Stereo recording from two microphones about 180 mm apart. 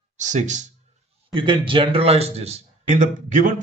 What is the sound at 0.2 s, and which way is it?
Speech, 40° right (ahead or behind).